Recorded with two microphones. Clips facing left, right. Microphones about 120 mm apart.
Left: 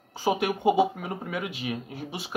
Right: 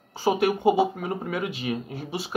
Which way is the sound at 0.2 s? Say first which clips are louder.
Right 3 dB; 15° left (ahead or behind).